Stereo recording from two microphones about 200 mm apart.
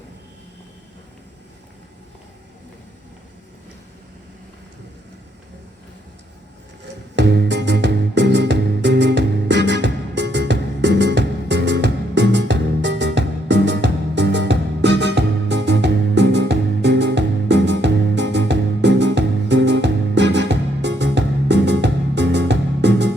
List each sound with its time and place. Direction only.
7.2 s music: 60° right (ahead or behind)